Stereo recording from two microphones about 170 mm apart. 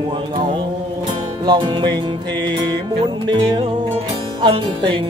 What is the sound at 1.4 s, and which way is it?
Music, 25° right (ahead or behind).